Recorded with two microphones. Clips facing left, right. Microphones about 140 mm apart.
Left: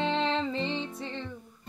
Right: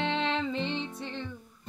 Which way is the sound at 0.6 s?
Centre (ahead or behind).